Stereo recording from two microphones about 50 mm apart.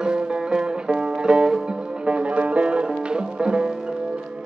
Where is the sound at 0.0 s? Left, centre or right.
Centre.